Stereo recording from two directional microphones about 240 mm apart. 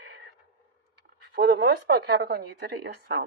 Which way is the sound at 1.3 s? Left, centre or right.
Right.